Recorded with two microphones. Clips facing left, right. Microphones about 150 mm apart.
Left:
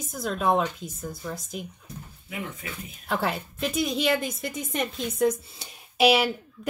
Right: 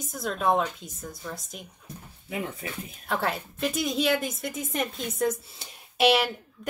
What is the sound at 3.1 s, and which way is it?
A woman's voice, centre (ahead or behind).